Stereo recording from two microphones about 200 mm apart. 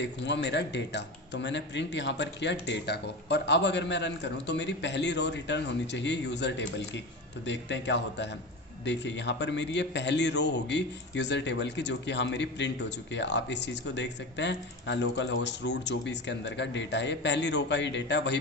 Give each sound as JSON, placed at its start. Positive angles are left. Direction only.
{"t": 0.0, "sound": "a man's voice", "side_deg": 60}